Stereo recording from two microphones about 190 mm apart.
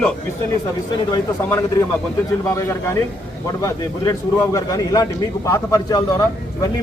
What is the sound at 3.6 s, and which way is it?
Speech, 15° left (ahead or behind).